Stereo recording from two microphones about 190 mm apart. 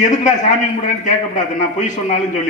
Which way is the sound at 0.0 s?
40° left (ahead or behind).